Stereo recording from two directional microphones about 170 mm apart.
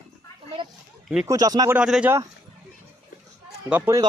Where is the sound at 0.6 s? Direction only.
30° right (ahead or behind).